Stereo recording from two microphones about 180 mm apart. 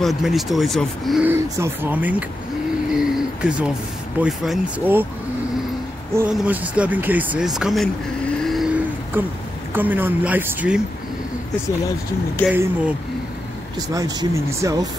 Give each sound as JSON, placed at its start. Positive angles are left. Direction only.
{"t": 0.0, "sound": "speech", "side_deg": 0}
{"t": 1.2, "sound": "speech", "side_deg": -10}
{"t": 2.9, "sound": "a sound", "side_deg": -5}
{"t": 4.2, "sound": "speech", "side_deg": -5}
{"t": 6.3, "sound": "speech", "side_deg": -10}
{"t": 8.5, "sound": "vehicle", "side_deg": -5}
{"t": 9.8, "sound": "speech", "side_deg": -10}
{"t": 12.4, "sound": "speech", "side_deg": -5}
{"t": 13.7, "sound": "speech", "side_deg": -20}